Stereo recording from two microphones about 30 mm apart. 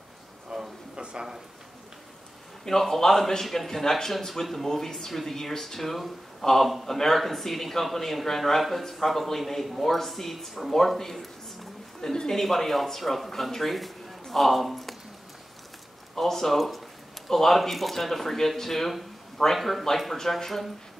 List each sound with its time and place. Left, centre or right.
0.5 s a sound: right
2.7 s speech: centre
16.2 s speech: centre